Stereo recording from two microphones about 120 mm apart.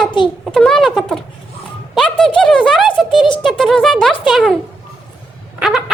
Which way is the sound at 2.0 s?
5° left (ahead or behind).